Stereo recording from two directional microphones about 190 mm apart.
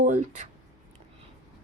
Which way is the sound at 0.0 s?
40° right (ahead or behind).